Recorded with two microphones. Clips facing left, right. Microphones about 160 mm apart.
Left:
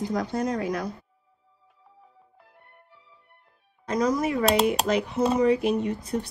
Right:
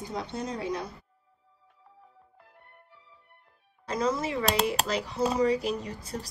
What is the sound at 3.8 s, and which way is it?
Speech, 30° right (ahead or behind).